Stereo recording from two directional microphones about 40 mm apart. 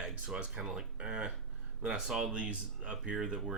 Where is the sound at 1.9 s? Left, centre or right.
Centre.